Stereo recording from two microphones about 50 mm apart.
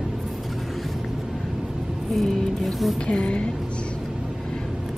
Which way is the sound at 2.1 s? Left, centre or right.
Centre.